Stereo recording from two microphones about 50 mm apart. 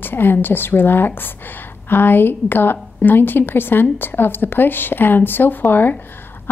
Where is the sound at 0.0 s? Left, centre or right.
Left.